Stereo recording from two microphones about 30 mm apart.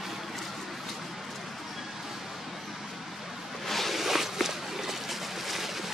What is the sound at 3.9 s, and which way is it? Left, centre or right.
Boat, centre.